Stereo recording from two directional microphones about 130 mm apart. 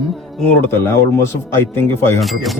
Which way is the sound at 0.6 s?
20° left (ahead or behind).